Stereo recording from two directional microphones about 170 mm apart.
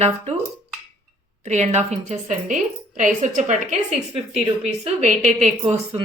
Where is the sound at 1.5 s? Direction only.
45° right (ahead or behind).